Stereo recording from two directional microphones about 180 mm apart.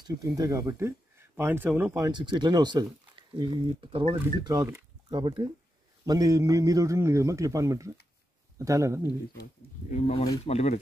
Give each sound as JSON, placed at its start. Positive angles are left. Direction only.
{"t": 0.0, "sound": "speech", "side_deg": -20}
{"t": 2.0, "sound": "a man's voice", "side_deg": -25}
{"t": 9.4, "sound": "speech", "side_deg": 40}